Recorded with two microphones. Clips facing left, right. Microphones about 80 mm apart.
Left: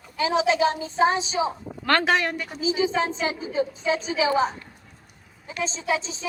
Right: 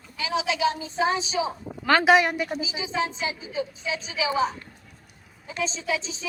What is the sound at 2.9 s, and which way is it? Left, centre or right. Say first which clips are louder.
A woman's voice: left 3 dB; left.